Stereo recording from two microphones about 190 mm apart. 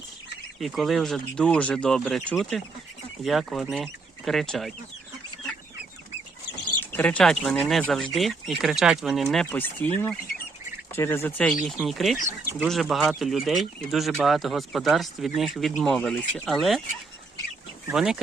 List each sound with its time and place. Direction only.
0.6 s speech: centre (ahead or behind)
6.7 s speech: 10° left (ahead or behind)
17.9 s speech: 5° right (ahead or behind)